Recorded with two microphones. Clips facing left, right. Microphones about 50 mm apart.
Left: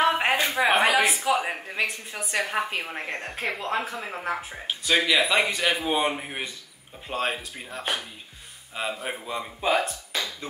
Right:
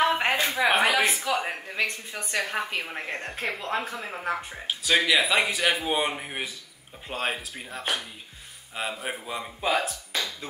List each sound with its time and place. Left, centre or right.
0.0 s speech: centre